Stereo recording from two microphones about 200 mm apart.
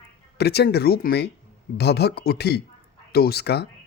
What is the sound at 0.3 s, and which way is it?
Speech, 55° left (ahead or behind).